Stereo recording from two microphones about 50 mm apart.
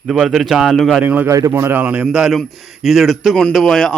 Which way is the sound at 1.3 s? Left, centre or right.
Right.